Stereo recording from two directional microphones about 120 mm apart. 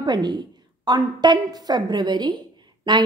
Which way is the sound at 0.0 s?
35° right (ahead or behind).